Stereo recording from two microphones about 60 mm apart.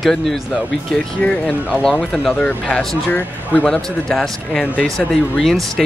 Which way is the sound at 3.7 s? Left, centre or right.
Centre.